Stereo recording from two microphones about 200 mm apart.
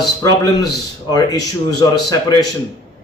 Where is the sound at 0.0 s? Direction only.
20° left (ahead or behind).